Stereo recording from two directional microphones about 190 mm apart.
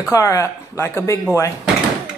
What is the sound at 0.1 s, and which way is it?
Speech, 15° left (ahead or behind).